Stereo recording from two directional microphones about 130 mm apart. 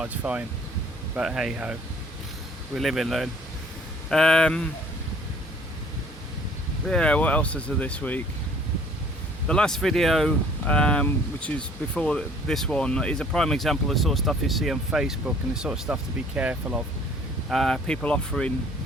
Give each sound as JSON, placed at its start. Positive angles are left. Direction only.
{"t": 0.0, "sound": "speech", "side_deg": -10}
{"t": 2.7, "sound": "speech", "side_deg": 0}
{"t": 6.8, "sound": "speech", "side_deg": 5}
{"t": 9.5, "sound": "speech", "side_deg": 5}
{"t": 17.5, "sound": "speech", "side_deg": 0}